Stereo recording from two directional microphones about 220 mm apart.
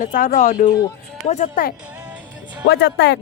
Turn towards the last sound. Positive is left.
turn(degrees=50)  # may be behind; listen again after turning